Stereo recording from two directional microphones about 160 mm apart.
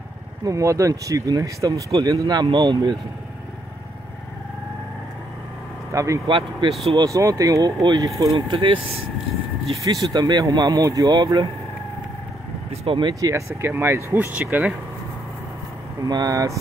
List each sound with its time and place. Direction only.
0.4 s speech: 20° right (ahead or behind)
5.9 s a man's voice: 20° right (ahead or behind)
6.2 s speech: 30° right (ahead or behind)
7.1 s speech: 20° right (ahead or behind)
9.8 s speech: 25° right (ahead or behind)
12.8 s speech: 30° right (ahead or behind)
13.2 s speech: 15° right (ahead or behind)
16.0 s speech: 25° right (ahead or behind)